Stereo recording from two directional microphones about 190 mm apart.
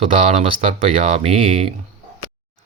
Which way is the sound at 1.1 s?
30° right (ahead or behind).